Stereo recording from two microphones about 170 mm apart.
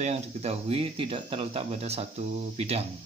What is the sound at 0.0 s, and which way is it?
Speech, 40° right (ahead or behind).